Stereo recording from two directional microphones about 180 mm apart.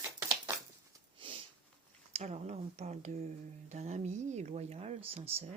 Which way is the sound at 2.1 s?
40° right (ahead or behind).